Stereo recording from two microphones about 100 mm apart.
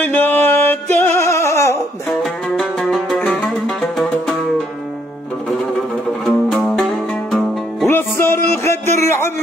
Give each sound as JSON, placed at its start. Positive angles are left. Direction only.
{"t": 0.0, "sound": "music", "side_deg": 15}
{"t": 2.0, "sound": "music", "side_deg": 0}
{"t": 6.2, "sound": "music", "side_deg": 0}
{"t": 7.9, "sound": "music", "side_deg": 25}
{"t": 8.6, "sound": "a sound", "side_deg": 30}